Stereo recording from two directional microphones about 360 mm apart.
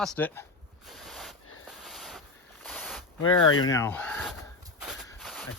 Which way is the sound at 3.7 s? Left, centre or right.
Centre.